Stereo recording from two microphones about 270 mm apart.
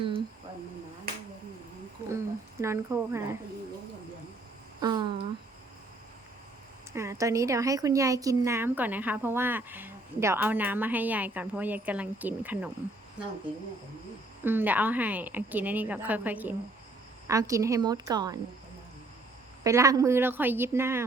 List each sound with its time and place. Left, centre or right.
2.0 s wild animals: centre
4.8 s speech: centre
6.9 s speech: centre
14.4 s speech: centre
19.6 s speech: centre